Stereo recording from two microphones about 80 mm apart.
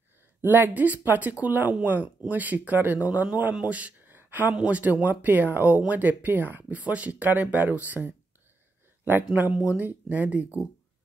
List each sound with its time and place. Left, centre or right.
0.4 s speech: right